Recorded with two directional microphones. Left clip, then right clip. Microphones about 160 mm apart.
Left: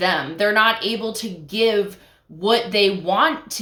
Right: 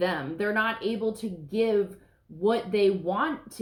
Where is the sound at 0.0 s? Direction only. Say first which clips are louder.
Left 9 dB; 20° left (ahead or behind).